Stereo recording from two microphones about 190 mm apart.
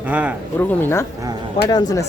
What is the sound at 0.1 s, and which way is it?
Speech, 10° right (ahead or behind).